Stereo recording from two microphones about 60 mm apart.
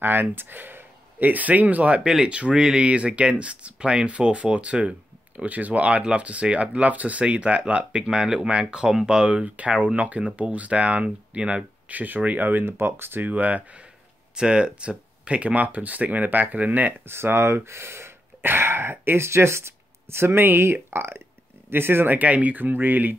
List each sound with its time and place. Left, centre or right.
0.0 s speech: right
14.3 s speech: centre; by 23.1 s right